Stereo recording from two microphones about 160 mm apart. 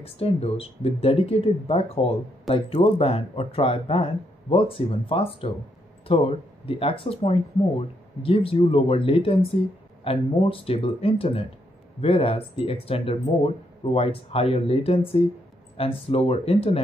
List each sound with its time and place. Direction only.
0.0 s speech: 40° left (ahead or behind)